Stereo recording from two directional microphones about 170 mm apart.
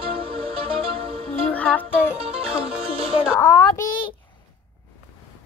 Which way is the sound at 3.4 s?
15° left (ahead or behind).